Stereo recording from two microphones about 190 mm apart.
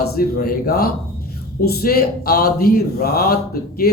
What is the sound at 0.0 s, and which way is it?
A man's voice, 50° left (ahead or behind).